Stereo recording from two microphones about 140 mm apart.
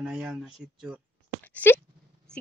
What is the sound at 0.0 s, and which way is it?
Speech, 5° right (ahead or behind).